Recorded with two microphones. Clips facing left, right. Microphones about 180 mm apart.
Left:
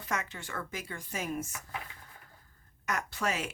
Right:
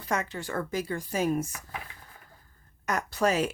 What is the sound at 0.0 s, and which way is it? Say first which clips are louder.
Speech: right 6 dB; 35° right (ahead or behind).